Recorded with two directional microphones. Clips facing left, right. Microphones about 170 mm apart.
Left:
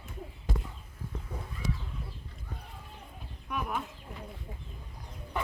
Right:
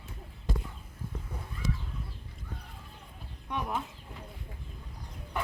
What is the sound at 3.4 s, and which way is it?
Speech, 25° right (ahead or behind).